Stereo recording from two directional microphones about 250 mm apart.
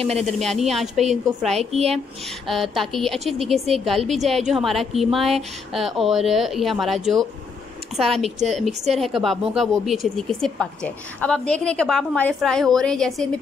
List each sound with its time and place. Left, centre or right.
0.0 s a woman's voice: right
0.4 s a woman's voice: centre
1.5 s a woman's voice: right
2.4 s a woman's voice: centre